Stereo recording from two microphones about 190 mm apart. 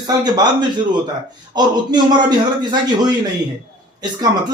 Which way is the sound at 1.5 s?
20° right (ahead or behind).